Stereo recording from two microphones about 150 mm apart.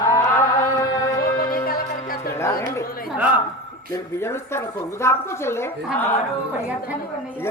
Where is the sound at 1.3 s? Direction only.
70° left (ahead or behind).